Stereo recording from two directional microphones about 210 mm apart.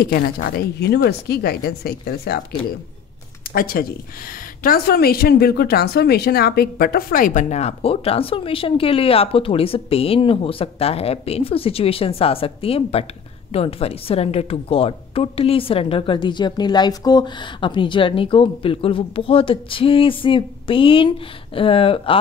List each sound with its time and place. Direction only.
0.0 s speech: 45° left (ahead or behind)
3.5 s a woman's voice: 45° left (ahead or behind); by 22.2 s 25° left (ahead or behind)